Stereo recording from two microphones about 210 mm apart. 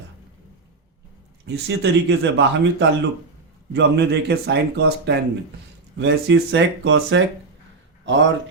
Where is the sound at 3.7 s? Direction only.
55° right (ahead or behind).